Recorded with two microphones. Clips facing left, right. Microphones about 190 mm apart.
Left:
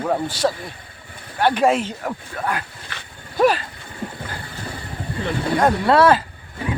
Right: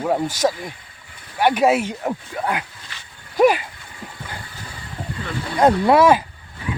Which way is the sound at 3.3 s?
15° right (ahead or behind).